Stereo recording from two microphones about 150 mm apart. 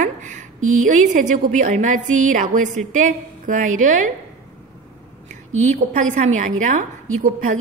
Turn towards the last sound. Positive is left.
turn(degrees=-60)  # may be behind; listen again after turning